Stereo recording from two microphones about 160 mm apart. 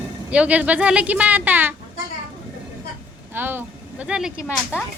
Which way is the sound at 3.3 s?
10° right (ahead or behind).